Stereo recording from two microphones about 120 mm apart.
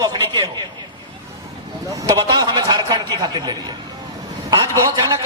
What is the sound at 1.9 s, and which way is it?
A man's voice, 30° right (ahead or behind).